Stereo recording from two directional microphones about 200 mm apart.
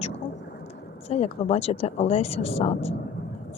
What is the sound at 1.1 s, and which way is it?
A woman's voice, 30° left (ahead or behind).